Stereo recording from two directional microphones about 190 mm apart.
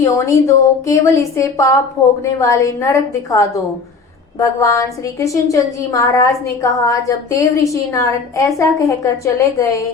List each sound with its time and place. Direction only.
0.0 s a woman's voice: 15° left (ahead or behind)